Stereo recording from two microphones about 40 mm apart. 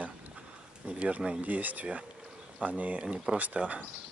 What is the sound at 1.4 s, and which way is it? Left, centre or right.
Speech, right.